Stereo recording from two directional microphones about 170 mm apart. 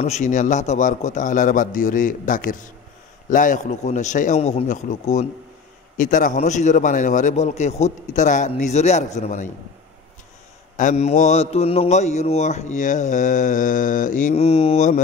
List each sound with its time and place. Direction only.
0.0 s a man's voice: 45° left (ahead or behind)
10.8 s a man's voice: 45° left (ahead or behind)